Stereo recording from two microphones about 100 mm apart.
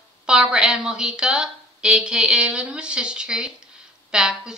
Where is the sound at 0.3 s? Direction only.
10° right (ahead or behind).